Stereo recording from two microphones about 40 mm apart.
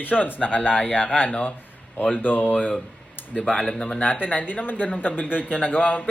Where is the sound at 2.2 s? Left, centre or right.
Left.